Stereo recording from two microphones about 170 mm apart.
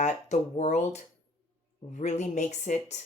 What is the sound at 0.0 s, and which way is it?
Speech, 45° left (ahead or behind).